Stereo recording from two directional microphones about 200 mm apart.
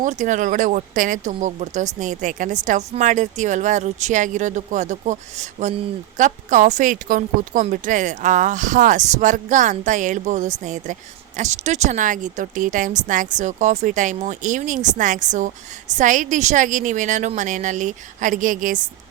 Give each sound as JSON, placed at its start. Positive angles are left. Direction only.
{"t": 0.0, "sound": "speech", "side_deg": -40}